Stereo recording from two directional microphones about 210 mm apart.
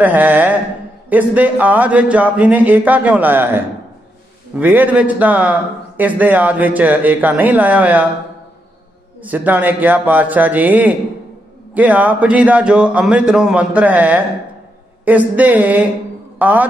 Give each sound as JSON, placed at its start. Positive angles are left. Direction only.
{"t": 0.0, "sound": "a man's voice", "side_deg": -10}
{"t": 9.2, "sound": "a man's voice", "side_deg": -10}